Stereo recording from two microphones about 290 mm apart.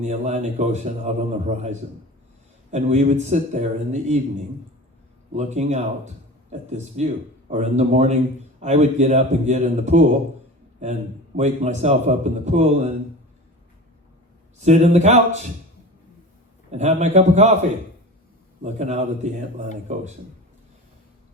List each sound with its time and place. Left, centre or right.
0.0 s speech: right
2.7 s speech: right
5.3 s speech: right
11.3 s speech: right
14.6 s speech: right
16.7 s speech: right
18.6 s speech: right